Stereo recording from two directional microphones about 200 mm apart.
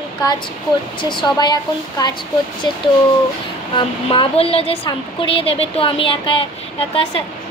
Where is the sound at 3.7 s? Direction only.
25° left (ahead or behind).